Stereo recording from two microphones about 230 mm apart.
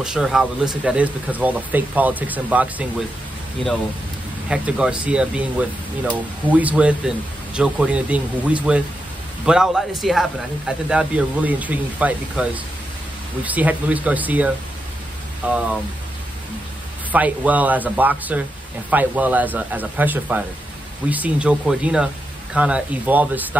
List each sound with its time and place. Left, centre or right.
0.0 s speech: centre
4.5 s speech: centre
17.1 s speech: centre